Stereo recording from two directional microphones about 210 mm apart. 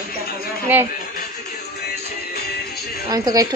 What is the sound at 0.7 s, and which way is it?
Speech, 10° right (ahead or behind).